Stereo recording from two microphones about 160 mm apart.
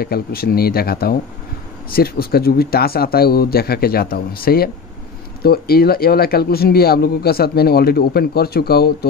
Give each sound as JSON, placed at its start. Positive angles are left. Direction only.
{"t": 0.0, "sound": "speech", "side_deg": 70}